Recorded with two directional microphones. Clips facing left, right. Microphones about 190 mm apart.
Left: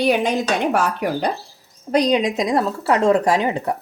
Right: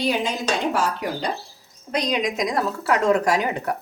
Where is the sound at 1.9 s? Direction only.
35° left (ahead or behind).